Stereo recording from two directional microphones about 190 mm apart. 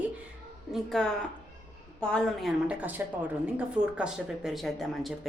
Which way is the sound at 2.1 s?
5° left (ahead or behind).